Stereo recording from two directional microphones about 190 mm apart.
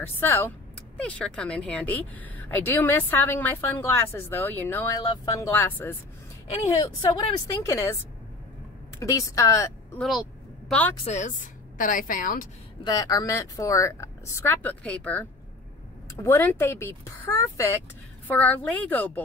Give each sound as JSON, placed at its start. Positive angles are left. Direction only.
{"t": 0.2, "sound": "a woman's voice", "side_deg": 10}
{"t": 6.8, "sound": "a woman's voice", "side_deg": 20}
{"t": 9.0, "sound": "a woman's voice", "side_deg": 15}
{"t": 11.1, "sound": "a woman's voice", "side_deg": 40}
{"t": 12.8, "sound": "a woman's voice", "side_deg": 20}